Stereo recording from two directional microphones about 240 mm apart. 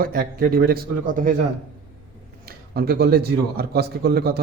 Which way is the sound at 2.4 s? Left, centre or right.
Right.